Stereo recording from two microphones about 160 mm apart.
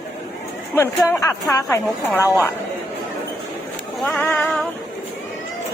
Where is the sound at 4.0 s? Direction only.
5° left (ahead or behind).